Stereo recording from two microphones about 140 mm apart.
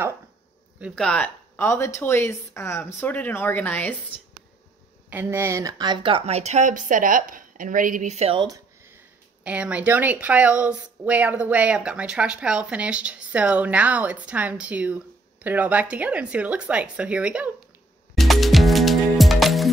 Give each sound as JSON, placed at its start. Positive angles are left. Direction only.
{"t": 0.9, "sound": "a woman's voice", "side_deg": 10}
{"t": 5.1, "sound": "speech", "side_deg": -15}
{"t": 9.4, "sound": "speech", "side_deg": -10}
{"t": 18.1, "sound": "music", "side_deg": 0}